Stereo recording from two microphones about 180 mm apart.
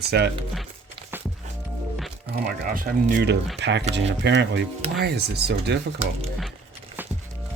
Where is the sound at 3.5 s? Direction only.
75° right (ahead or behind).